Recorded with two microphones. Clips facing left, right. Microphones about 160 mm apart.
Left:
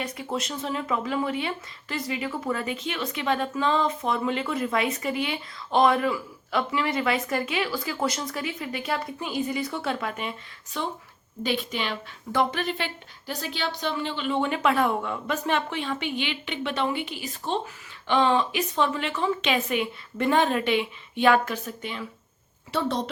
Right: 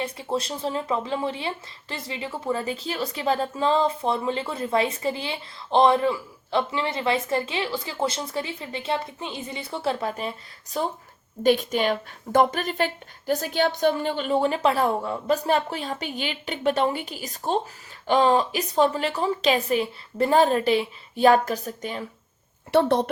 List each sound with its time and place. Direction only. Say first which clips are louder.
0.0 s speech: right 3 dB; 30° right (ahead or behind)
22.7 s a woman's voice: right 7 dB; 60° right (ahead or behind)